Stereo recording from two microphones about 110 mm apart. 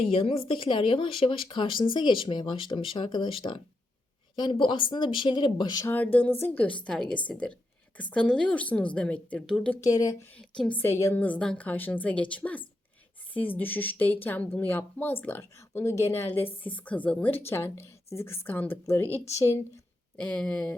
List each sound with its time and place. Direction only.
0.1 s speech: 60° left (ahead or behind); by 5.8 s 40° left (ahead or behind)
5.9 s speech: 15° left (ahead or behind)
6.8 s speech: 5° left (ahead or behind)
9.8 s speech: 35° left (ahead or behind)
10.3 s a woman's voice: 5° left (ahead or behind)
10.8 s a woman's voice: 25° left (ahead or behind)
20.1 s speech: 10° left (ahead or behind)